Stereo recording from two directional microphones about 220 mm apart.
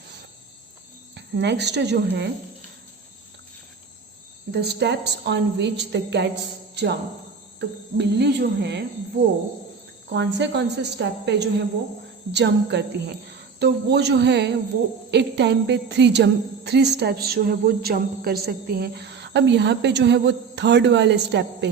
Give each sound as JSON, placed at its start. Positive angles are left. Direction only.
{"t": 1.1, "sound": "speech", "side_deg": -50}
{"t": 4.5, "sound": "speech", "side_deg": -50}
{"t": 10.1, "sound": "speech", "side_deg": -50}